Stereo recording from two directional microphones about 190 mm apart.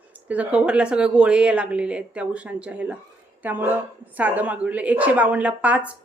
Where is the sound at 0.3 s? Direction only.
5° right (ahead or behind).